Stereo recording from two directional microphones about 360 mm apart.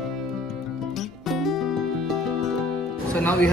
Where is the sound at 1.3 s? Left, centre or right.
Centre.